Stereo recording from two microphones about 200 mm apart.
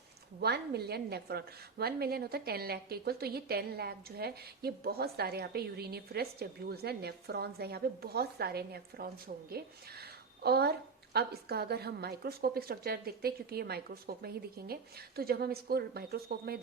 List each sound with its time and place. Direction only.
0.3 s a woman's voice: 55° right (ahead or behind)